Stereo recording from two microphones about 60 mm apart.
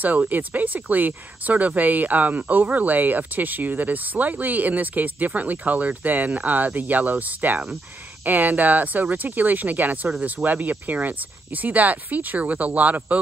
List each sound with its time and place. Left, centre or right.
0.0 s speech: right